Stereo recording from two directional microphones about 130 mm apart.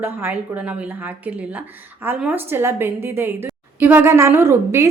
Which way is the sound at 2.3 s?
15° right (ahead or behind).